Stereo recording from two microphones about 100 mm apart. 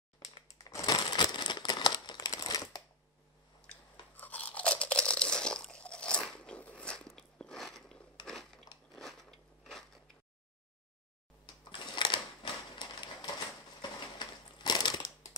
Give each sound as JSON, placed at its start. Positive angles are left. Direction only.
{"t": 0.8, "sound": "crumpling", "side_deg": 45}
{"t": 4.2, "sound": "crunch", "side_deg": 15}
{"t": 8.3, "sound": "biting", "side_deg": 5}
{"t": 11.7, "sound": "a sound", "side_deg": 50}